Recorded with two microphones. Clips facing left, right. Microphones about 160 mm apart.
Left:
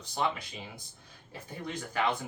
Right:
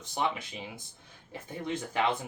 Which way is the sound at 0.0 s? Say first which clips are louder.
Even; 20° right (ahead or behind).